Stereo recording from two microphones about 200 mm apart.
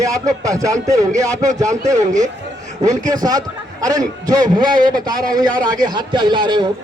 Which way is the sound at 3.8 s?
20° right (ahead or behind).